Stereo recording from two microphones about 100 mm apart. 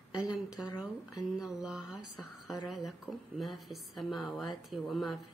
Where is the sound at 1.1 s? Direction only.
5° right (ahead or behind).